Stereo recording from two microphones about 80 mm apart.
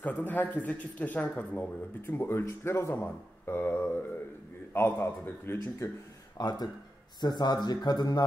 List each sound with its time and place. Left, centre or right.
0.0 s speech: left
2.0 s a man's voice: left
6.3 s speech: left